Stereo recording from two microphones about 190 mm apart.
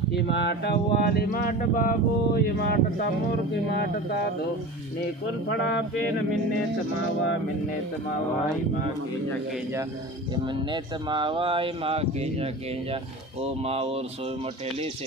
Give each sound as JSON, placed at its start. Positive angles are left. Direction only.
{"t": 0.1, "sound": "speech", "side_deg": 60}
{"t": 10.3, "sound": "speech", "side_deg": -25}